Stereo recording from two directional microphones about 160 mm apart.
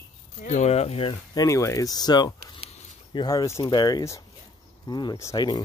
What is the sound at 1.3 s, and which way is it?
Speech, 20° left (ahead or behind).